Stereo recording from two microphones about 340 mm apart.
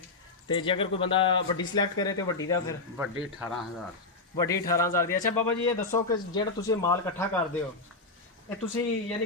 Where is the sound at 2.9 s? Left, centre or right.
Centre.